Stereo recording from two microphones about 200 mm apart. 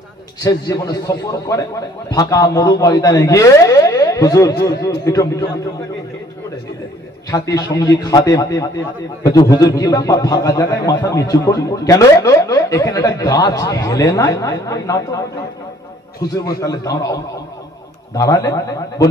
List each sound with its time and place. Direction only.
0.4 s a man's voice: 20° left (ahead or behind)
7.2 s a man's voice: 20° left (ahead or behind)
16.6 s a man's voice: 20° left (ahead or behind)